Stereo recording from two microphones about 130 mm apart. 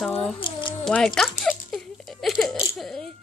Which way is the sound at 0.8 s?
5° left (ahead or behind).